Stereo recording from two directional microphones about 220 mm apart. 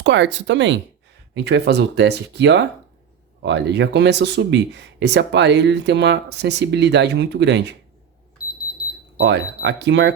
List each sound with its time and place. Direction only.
0.0 s speech: 55° right (ahead or behind)
9.1 s speech: 50° right (ahead or behind)